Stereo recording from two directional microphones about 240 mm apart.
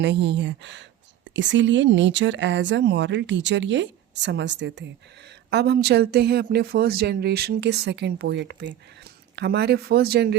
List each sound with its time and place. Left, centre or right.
0.0 s speech: right